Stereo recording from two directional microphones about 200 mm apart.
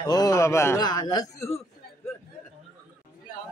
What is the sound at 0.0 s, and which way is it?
A man's voice, 20° left (ahead or behind).